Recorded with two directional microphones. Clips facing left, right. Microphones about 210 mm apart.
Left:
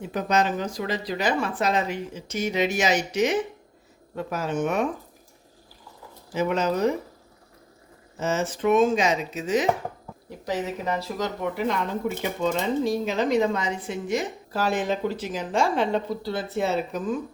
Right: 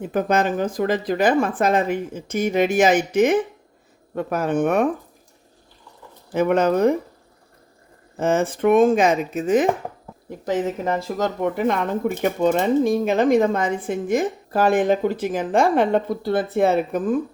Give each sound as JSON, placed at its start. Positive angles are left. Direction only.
{"t": 0.0, "sound": "speech", "side_deg": -50}
{"t": 6.3, "sound": "speech", "side_deg": -55}
{"t": 8.1, "sound": "speech", "side_deg": -55}